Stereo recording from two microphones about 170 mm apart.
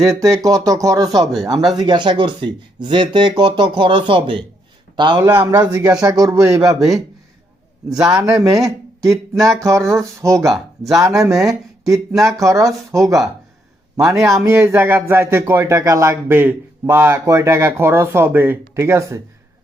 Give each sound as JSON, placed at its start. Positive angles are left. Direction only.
{"t": 0.2, "sound": "a man's voice", "side_deg": -20}
{"t": 5.2, "sound": "speech", "side_deg": -10}
{"t": 7.9, "sound": "speech", "side_deg": -5}
{"t": 8.2, "sound": "speech", "side_deg": -20}
{"t": 10.4, "sound": "speech", "side_deg": 0}
{"t": 11.3, "sound": "speech", "side_deg": -20}
{"t": 12.1, "sound": "speech", "side_deg": 0}
{"t": 12.4, "sound": "a man's voice", "side_deg": -20}